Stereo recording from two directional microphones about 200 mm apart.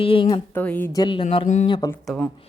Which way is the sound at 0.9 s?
20° left (ahead or behind).